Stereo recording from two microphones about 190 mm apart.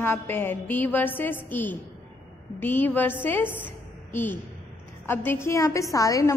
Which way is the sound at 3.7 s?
10° left (ahead or behind).